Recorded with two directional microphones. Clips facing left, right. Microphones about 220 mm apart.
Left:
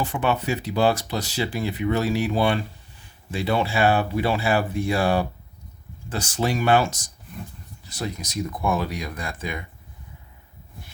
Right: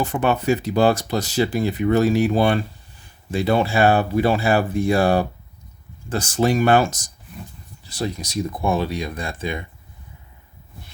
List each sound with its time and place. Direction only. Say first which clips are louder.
0.0 s speech: right 4 dB; 45° right (ahead or behind)
7.9 s speech: right 4 dB; 30° right (ahead or behind)